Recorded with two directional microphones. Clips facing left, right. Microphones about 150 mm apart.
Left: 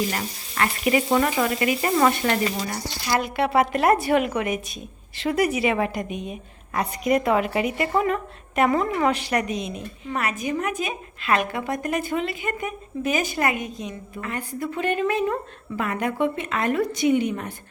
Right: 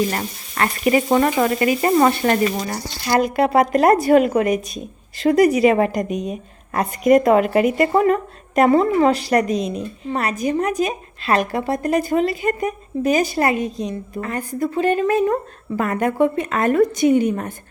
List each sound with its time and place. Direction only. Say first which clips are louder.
0.1 s a woman's voice: right 4 dB; 40° right (ahead or behind)